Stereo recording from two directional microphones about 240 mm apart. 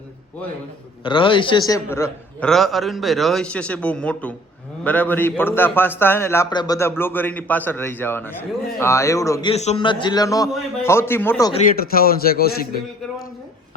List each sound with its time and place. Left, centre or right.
1.0 s a man's voice: left
11.8 s a man's voice: left